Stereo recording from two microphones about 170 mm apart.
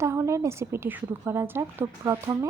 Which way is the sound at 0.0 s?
15° right (ahead or behind).